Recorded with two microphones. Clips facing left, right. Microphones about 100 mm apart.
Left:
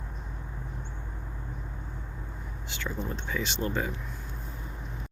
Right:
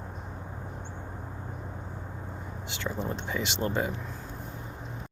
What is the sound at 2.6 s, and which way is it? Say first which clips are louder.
Speech: right 2 dB; 25° right (ahead or behind).